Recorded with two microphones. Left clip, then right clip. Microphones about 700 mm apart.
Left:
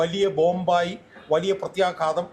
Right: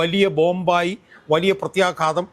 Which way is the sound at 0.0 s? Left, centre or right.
Right.